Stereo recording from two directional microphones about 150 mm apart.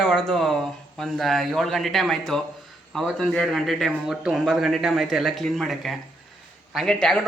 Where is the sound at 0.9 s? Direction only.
Centre (ahead or behind).